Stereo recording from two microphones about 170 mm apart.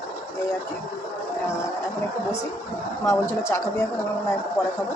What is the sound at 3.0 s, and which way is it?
Speech, 15° left (ahead or behind).